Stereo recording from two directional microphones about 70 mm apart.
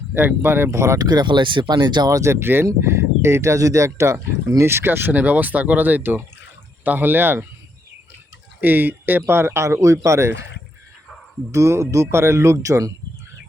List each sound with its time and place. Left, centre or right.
0.1 s speech: right
0.9 s speech: right
2.0 s speech: right
8.6 s speech: right
11.5 s speech: right